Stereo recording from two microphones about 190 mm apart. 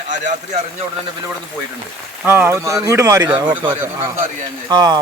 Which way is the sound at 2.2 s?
10° right (ahead or behind).